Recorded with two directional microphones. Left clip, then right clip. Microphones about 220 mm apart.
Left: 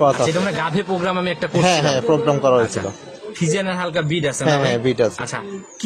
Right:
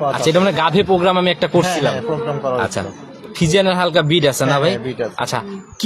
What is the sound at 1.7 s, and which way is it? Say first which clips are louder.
Speech: left 2 dB; 50° left (ahead or behind).